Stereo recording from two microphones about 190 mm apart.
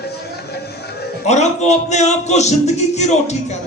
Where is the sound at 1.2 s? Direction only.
35° left (ahead or behind).